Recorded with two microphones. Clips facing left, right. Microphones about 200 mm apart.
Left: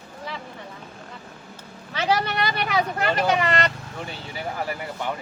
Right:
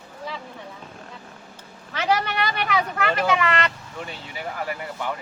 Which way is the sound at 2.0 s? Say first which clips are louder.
Even; 35° left (ahead or behind).